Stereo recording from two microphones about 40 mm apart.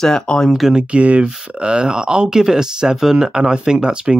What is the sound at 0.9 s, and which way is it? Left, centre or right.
Speech, right.